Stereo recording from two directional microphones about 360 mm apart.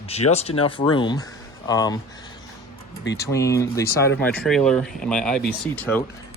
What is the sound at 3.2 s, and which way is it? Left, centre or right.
Speech, centre.